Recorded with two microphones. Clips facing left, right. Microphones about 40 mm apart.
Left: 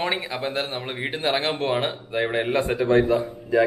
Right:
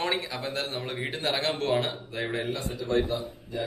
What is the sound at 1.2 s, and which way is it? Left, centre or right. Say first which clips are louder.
Speech: left 4 dB; left.